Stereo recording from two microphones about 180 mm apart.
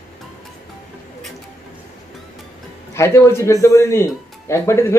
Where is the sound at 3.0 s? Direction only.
15° left (ahead or behind).